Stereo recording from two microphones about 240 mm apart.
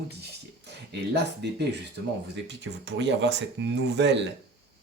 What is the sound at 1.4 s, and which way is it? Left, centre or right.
Speech, right.